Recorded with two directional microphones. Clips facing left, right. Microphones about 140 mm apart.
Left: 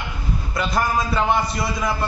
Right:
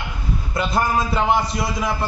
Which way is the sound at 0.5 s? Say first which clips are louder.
Right 1 dB; 25° right (ahead or behind).